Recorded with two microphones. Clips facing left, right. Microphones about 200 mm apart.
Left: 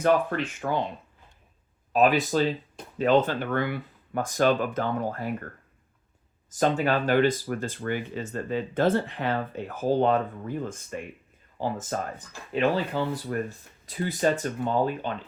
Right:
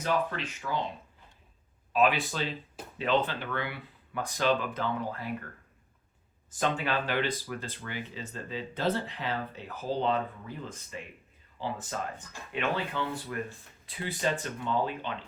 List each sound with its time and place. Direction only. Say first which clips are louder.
0.0 s speech: left 7 dB; 55° left (ahead or behind)
1.9 s speech: left 5 dB; 40° left (ahead or behind)
6.5 s speech: left 6 dB; 40° left (ahead or behind)